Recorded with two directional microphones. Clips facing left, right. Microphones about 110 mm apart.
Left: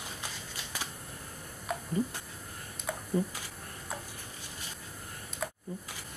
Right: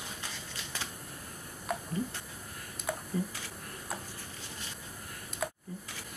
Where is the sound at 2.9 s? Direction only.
Centre (ahead or behind).